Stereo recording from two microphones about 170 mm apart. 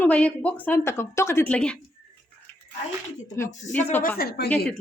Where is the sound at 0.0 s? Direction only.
10° left (ahead or behind).